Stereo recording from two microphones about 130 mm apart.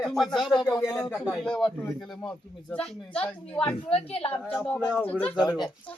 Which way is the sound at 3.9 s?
50° left (ahead or behind).